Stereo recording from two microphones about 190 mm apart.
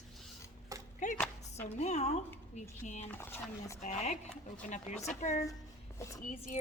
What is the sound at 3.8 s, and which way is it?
A woman's voice, 40° left (ahead or behind).